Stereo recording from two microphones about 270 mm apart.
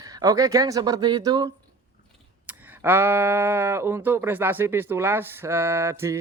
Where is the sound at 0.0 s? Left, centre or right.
Centre.